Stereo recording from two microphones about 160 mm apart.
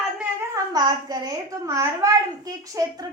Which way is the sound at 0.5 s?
25° right (ahead or behind).